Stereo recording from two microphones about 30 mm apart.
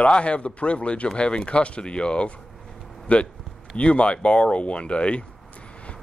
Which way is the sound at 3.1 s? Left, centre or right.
Left.